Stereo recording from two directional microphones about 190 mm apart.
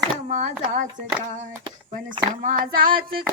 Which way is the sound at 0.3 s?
40° right (ahead or behind).